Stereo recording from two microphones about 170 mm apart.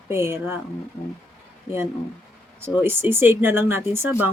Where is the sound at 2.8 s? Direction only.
15° right (ahead or behind).